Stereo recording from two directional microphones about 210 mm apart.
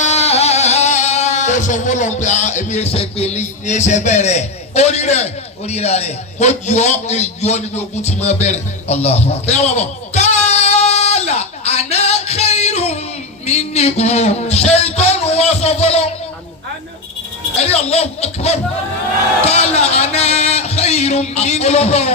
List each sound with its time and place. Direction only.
0.0 s music: 30° left (ahead or behind)
13.4 s a man's voice: 30° left (ahead or behind)
17.6 s a man's voice: 30° left (ahead or behind)